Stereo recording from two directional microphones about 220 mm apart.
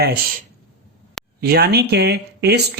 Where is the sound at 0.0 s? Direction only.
45° right (ahead or behind).